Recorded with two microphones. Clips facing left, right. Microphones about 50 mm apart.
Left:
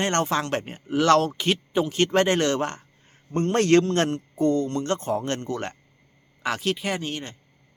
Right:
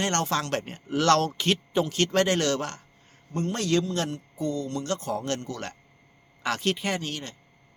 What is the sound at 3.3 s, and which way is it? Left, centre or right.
A man's voice, left.